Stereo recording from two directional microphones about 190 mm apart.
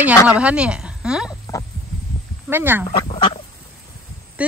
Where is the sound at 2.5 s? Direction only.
10° right (ahead or behind).